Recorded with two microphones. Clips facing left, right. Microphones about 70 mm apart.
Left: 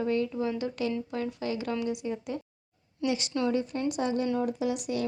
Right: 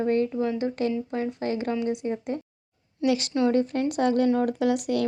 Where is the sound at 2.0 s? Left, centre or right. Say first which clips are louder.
Right 4 dB; right.